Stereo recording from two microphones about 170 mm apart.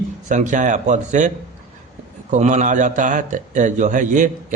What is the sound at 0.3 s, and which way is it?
A man's voice, 45° right (ahead or behind).